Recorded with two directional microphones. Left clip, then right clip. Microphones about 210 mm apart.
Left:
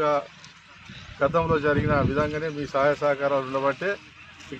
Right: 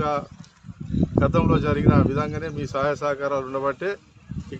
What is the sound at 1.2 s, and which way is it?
Speech, 20° right (ahead or behind).